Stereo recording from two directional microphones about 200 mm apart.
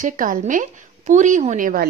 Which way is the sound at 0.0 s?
40° right (ahead or behind).